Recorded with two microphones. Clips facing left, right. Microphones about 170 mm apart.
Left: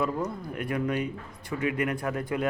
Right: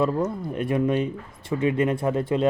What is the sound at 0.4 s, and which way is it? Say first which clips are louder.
Speech: right 6 dB; 25° right (ahead or behind).